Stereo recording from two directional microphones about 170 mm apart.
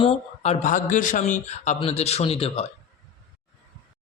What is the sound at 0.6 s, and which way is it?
A man's voice, 50° left (ahead or behind).